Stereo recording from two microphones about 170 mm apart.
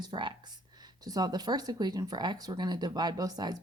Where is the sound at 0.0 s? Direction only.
25° right (ahead or behind).